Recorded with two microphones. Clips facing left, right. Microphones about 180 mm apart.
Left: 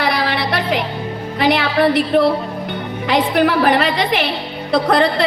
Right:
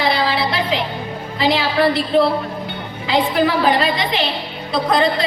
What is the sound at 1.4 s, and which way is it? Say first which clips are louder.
A woman's voice: left 2 dB; 65° left (ahead or behind).